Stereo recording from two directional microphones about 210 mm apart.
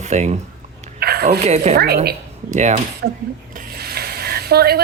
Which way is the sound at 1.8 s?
50° right (ahead or behind).